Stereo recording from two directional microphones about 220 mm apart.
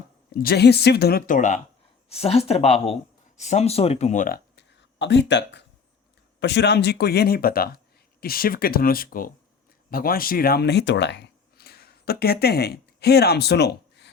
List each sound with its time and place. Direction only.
0.3 s speech: 45° left (ahead or behind)
4.5 s a sound: 50° left (ahead or behind)
6.4 s speech: 50° left (ahead or behind)